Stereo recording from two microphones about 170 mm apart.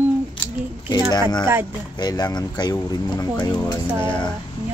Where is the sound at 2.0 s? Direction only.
25° left (ahead or behind).